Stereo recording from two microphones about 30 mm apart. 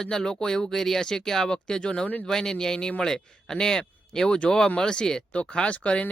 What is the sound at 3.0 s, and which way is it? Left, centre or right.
Speech, centre.